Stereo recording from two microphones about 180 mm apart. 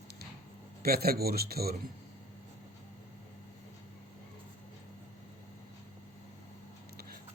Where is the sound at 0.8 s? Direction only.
55° right (ahead or behind).